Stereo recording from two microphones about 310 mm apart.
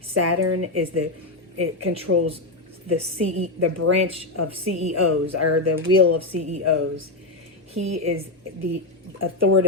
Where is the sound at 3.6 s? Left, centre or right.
Right.